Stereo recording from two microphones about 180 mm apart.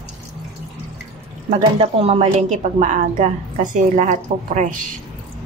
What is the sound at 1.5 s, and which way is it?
A woman's voice, 35° right (ahead or behind).